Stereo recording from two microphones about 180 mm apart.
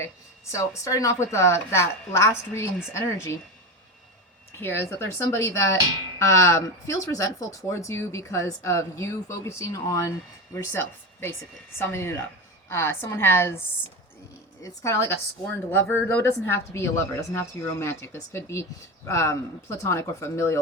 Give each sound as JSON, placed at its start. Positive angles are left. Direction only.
{"t": 0.5, "sound": "speech", "side_deg": 15}
{"t": 4.5, "sound": "speech", "side_deg": 15}
{"t": 14.6, "sound": "speech", "side_deg": 15}